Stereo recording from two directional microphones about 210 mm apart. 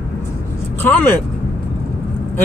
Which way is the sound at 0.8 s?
10° left (ahead or behind).